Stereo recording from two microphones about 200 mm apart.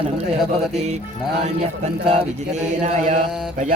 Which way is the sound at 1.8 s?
35° right (ahead or behind).